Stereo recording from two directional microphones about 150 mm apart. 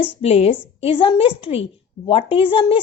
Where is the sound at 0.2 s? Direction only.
40° left (ahead or behind).